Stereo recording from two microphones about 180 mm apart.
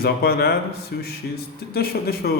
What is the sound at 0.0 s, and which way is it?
A man's voice, 60° left (ahead or behind).